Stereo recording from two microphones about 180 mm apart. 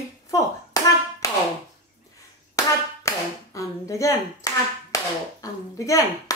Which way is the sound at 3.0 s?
15° left (ahead or behind).